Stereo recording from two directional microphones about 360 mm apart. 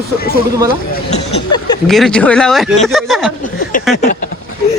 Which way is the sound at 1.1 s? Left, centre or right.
Centre.